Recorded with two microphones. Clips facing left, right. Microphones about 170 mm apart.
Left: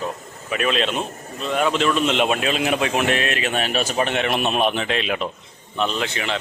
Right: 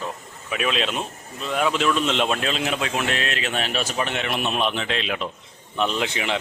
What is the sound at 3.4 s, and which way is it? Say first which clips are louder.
Speech: left 3 dB; 50° left (ahead or behind).